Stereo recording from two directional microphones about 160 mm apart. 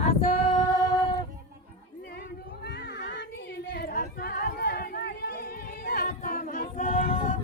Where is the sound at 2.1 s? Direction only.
90° left.